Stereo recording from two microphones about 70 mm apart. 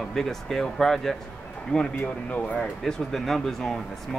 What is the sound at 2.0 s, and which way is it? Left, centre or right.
Speech, centre.